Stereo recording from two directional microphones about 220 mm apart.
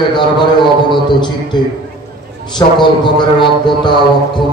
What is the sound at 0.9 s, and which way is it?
Speech, 20° left (ahead or behind).